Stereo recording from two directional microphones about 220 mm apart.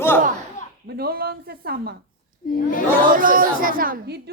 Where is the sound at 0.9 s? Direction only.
45° right (ahead or behind).